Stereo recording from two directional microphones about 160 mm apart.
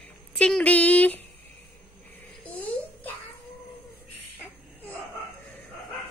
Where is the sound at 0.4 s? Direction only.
5° left (ahead or behind).